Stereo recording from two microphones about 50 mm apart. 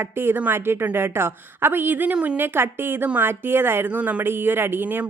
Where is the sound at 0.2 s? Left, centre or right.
Right.